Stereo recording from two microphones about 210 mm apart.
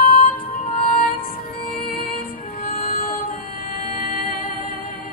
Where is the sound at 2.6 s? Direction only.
40° left (ahead or behind).